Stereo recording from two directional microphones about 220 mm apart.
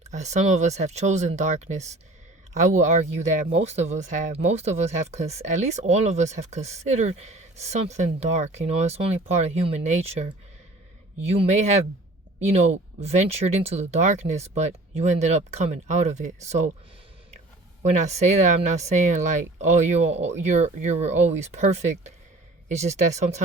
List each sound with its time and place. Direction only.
0.1 s speech: 30° right (ahead or behind)
17.9 s speech: 30° right (ahead or behind)